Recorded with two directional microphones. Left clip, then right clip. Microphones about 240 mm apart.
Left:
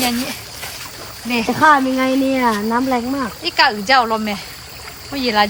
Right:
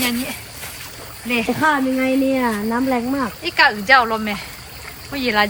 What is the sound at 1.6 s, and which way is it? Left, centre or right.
Speech, left.